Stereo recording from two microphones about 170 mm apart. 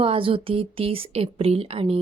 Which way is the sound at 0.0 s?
30° right (ahead or behind).